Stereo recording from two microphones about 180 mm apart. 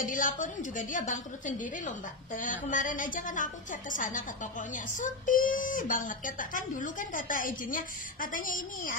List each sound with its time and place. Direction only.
0.0 s a woman's voice: 50° left (ahead or behind)